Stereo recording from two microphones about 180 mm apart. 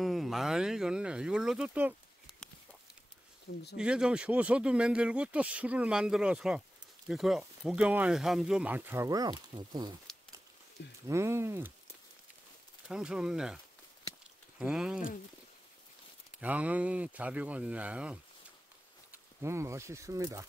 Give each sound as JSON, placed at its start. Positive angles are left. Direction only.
{"t": 0.0, "sound": "speech", "side_deg": 0}
{"t": 3.7, "sound": "speech", "side_deg": -5}
{"t": 11.1, "sound": "speech", "side_deg": -15}
{"t": 12.8, "sound": "speech", "side_deg": -5}
{"t": 14.6, "sound": "speech", "side_deg": -5}
{"t": 16.3, "sound": "speech", "side_deg": -10}